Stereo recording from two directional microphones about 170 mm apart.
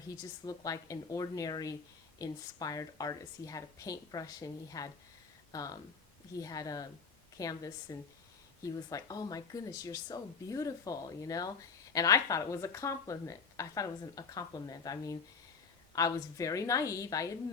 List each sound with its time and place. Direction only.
0.2 s a woman's voice: 20° left (ahead or behind)